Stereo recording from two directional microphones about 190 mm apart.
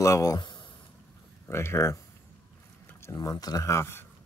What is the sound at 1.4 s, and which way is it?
Speech, 15° left (ahead or behind).